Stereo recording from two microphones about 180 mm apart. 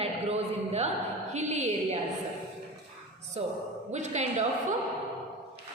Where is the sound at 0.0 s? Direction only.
35° right (ahead or behind).